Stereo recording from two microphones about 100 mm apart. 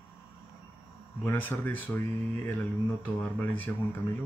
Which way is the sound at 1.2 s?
20° left (ahead or behind).